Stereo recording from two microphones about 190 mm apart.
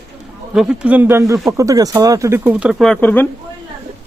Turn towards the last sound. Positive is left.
turn(degrees=10)  # may be behind; listen again after turning